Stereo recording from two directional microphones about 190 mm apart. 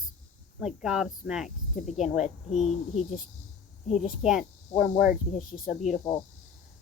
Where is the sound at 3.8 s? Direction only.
40° left (ahead or behind).